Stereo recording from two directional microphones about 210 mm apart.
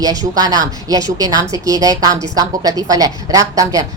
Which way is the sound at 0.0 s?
20° right (ahead or behind).